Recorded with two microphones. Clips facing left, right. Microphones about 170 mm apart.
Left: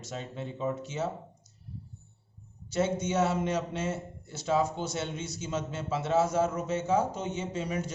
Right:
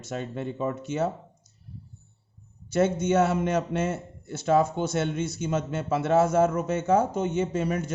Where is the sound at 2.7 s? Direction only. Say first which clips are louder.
Right 6 dB; 55° right (ahead or behind).